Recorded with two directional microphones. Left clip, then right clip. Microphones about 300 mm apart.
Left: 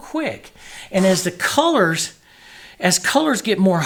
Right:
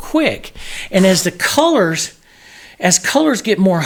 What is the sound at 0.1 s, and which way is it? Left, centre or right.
Speech, right.